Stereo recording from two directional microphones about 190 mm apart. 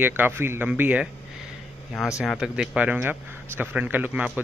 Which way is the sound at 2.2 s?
Centre (ahead or behind).